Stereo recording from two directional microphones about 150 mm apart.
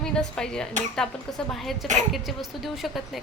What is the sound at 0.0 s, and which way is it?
A woman's voice, 5° left (ahead or behind).